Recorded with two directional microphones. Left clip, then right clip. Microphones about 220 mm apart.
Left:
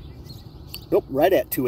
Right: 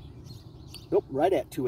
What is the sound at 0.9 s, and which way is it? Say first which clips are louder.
Speech: left 6 dB; 30° left (ahead or behind).